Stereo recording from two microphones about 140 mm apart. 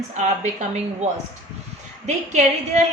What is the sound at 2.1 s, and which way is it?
Speech, 55° right (ahead or behind).